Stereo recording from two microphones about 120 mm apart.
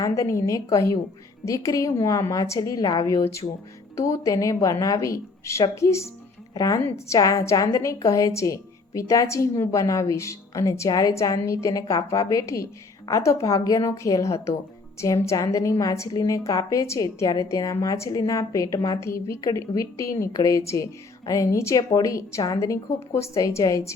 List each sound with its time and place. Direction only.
0.0 s a woman's voice: 25° left (ahead or behind)